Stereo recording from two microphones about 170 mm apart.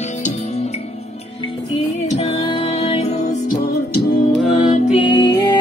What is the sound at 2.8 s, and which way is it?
Music, 35° left (ahead or behind).